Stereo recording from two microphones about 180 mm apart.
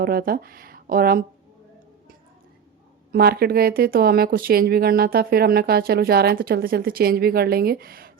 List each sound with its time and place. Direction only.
0.0 s speech: 55° right (ahead or behind)
3.1 s speech: 60° right (ahead or behind)